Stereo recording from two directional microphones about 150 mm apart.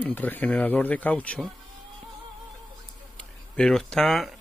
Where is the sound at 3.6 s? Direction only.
5° left (ahead or behind).